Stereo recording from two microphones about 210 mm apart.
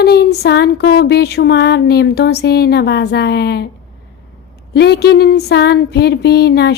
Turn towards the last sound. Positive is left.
turn(degrees=50)  # may be behind; listen again after turning